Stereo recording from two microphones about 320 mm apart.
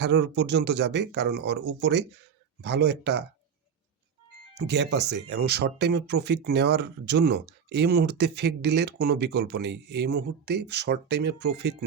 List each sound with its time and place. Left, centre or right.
0.0 s speech: right
4.5 s speech: right